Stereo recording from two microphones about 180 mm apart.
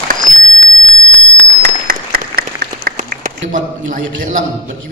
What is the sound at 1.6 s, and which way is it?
Applause, 55° right (ahead or behind).